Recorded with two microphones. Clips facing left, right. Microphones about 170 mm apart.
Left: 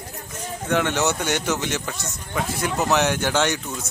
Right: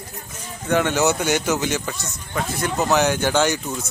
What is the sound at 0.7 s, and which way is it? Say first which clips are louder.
Speech: right 3 dB; centre (ahead or behind).